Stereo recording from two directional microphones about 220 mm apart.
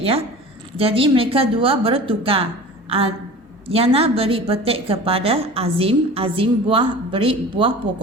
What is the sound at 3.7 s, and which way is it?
A woman's voice, 25° right (ahead or behind).